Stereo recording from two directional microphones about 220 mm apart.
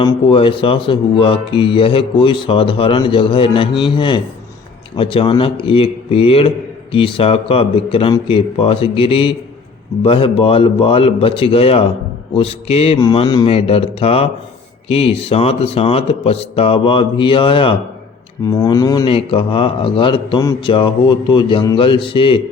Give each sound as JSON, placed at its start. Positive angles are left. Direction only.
{"t": 0.0, "sound": "speech", "side_deg": 25}